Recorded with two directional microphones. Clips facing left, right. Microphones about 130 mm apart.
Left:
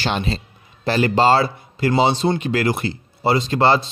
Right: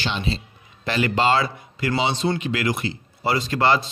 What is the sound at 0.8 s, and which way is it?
A man's voice, 35° left (ahead or behind).